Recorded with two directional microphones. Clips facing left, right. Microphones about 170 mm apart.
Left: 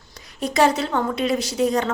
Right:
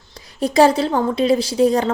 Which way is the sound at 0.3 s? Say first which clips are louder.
Right 5 dB; 35° right (ahead or behind).